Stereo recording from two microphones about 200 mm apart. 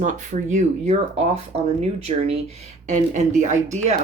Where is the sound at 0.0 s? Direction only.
40° right (ahead or behind).